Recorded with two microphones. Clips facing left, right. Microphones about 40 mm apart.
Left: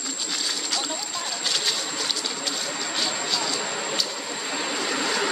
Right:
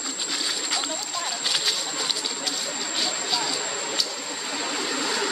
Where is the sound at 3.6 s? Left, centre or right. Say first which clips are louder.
Left 2 dB; centre.